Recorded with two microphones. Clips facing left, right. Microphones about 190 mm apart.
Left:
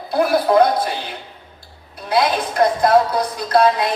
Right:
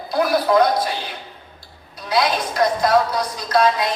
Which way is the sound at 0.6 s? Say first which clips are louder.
Left 2 dB; 55° left (ahead or behind).